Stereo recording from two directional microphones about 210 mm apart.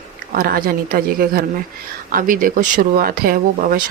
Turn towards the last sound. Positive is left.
turn(degrees=-45)  # may be behind; listen again after turning